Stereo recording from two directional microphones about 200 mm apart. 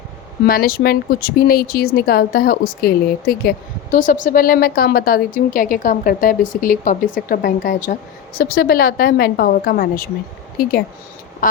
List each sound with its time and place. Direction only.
0.4 s a woman's voice: 45° left (ahead or behind)